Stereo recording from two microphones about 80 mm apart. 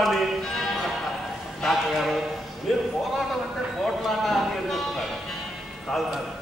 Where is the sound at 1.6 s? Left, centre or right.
Centre.